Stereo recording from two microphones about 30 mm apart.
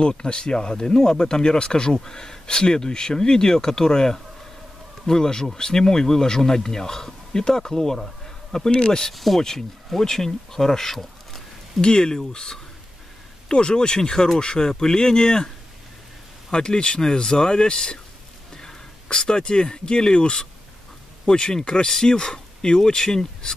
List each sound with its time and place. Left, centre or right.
0.2 s speech: left
9.1 s speech: centre
9.4 s speech: centre
11.8 s speech: left
16.6 s speech: left
18.5 s a sound: centre
19.1 s speech: left